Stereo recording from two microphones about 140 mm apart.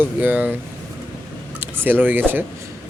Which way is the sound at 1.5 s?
15° right (ahead or behind).